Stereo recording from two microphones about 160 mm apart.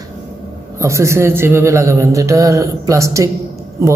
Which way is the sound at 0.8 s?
20° right (ahead or behind).